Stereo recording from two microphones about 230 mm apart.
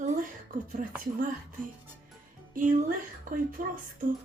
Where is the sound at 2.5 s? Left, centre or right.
Right.